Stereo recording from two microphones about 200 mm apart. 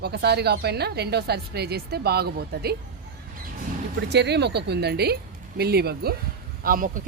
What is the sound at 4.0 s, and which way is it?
A woman's voice, 60° right (ahead or behind).